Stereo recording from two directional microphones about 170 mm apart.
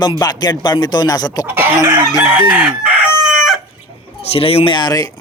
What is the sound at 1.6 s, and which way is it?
Chicken, 15° right (ahead or behind).